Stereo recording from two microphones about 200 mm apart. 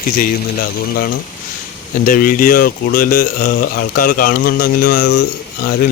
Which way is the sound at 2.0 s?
45° left (ahead or behind).